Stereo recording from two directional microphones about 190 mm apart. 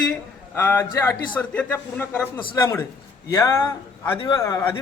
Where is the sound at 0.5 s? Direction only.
10° left (ahead or behind).